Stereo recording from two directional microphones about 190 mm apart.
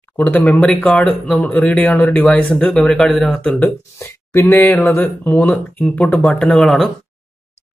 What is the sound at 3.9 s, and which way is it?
Speech, 15° left (ahead or behind).